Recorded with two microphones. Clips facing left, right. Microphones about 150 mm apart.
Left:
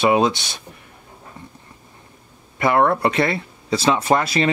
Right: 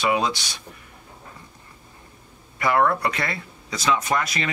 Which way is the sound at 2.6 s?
25° left (ahead or behind).